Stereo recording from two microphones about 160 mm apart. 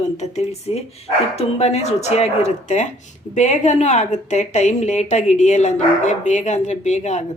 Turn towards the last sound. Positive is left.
turn(degrees=45)  # may be behind; listen again after turning